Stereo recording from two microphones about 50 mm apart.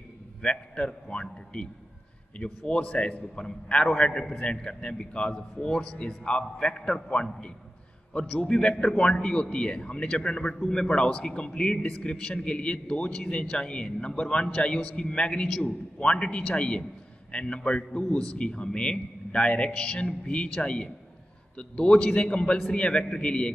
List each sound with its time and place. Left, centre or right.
0.4 s a man's voice: centre
8.4 s a man's voice: centre